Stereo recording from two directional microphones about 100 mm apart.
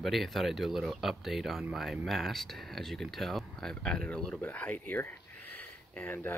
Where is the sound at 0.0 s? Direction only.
Centre (ahead or behind).